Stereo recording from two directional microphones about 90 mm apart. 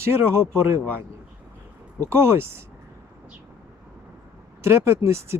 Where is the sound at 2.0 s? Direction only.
30° right (ahead or behind).